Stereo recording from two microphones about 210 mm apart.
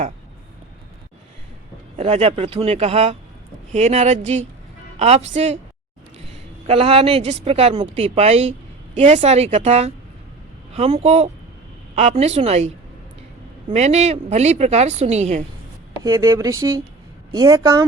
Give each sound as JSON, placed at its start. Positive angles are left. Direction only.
{"t": 2.0, "sound": "speech", "side_deg": -30}
{"t": 6.7, "sound": "speech", "side_deg": -30}
{"t": 13.7, "sound": "speech", "side_deg": -30}
{"t": 16.0, "sound": "speech", "side_deg": -15}